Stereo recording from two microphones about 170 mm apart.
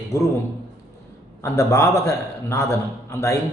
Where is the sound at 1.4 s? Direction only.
15° left (ahead or behind).